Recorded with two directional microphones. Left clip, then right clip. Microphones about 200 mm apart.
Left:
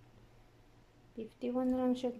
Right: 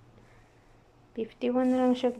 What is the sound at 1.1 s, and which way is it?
Speech, centre (ahead or behind).